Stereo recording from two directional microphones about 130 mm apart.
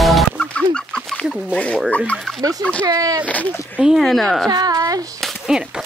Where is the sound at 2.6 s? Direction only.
10° left (ahead or behind).